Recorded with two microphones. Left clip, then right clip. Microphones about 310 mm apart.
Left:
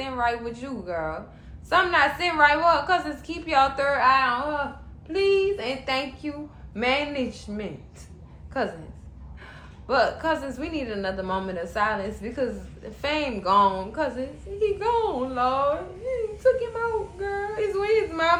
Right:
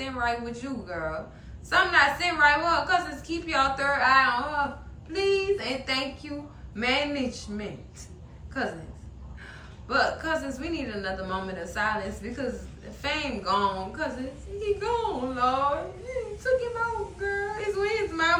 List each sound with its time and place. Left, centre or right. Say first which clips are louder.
0.0 s a woman's voice: left 3 dB; centre
17.2 s a woman's voice: left 2 dB; centre